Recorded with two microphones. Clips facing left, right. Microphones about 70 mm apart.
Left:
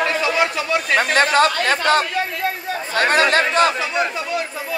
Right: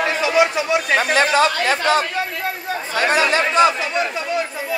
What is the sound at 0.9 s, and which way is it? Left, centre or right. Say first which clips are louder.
Speech: left 1 dB; left.